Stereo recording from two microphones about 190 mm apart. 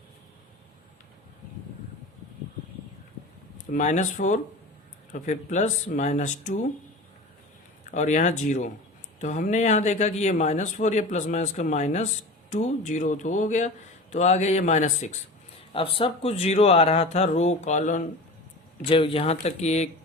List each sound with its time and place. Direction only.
3.7 s speech: 40° left (ahead or behind)
7.9 s speech: 40° left (ahead or behind)
15.7 s speech: 30° left (ahead or behind)